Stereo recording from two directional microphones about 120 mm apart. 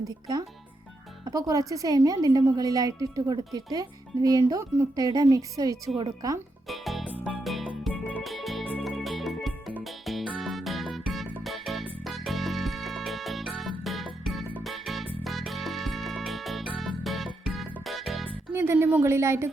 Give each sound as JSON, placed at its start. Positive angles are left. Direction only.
{"t": 1.2, "sound": "a woman's voice", "side_deg": -30}
{"t": 6.7, "sound": "music", "side_deg": 0}
{"t": 18.5, "sound": "speech", "side_deg": -20}